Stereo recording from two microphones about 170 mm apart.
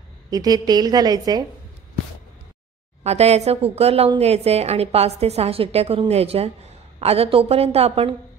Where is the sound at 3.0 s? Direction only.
40° right (ahead or behind).